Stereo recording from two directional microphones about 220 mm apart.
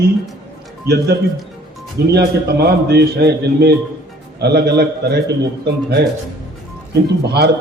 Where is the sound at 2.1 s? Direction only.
45° right (ahead or behind).